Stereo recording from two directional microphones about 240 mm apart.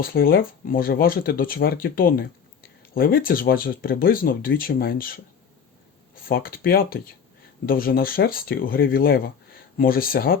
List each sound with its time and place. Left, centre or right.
0.0 s speech: left
6.2 s speech: left